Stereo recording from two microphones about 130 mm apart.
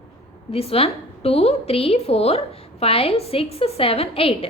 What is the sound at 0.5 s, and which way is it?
A woman's voice, 50° left (ahead or behind).